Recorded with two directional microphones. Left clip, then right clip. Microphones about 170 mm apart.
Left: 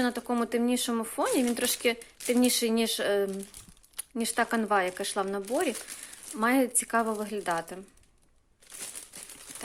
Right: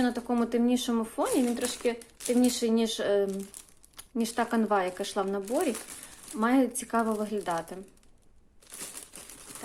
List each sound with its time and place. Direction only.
0.0 s speech: 25° left (ahead or behind)
1.5 s speech: 35° left (ahead or behind)